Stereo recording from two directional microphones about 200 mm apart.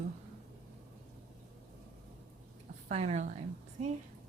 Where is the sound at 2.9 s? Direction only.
35° right (ahead or behind).